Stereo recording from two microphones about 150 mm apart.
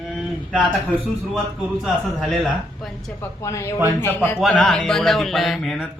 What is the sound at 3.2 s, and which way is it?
A man's voice, 20° left (ahead or behind).